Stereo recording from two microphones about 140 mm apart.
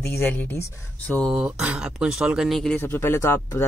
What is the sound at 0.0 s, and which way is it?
Speech, 15° left (ahead or behind).